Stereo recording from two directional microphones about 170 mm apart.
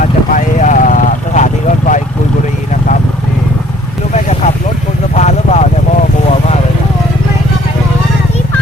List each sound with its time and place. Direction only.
0.0 s vehicle: 50° left (ahead or behind)
4.1 s vehicle: 40° left (ahead or behind)